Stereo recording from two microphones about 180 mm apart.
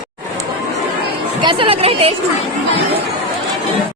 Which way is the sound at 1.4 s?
30° right (ahead or behind).